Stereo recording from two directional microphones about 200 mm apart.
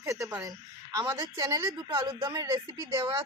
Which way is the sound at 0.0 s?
15° right (ahead or behind).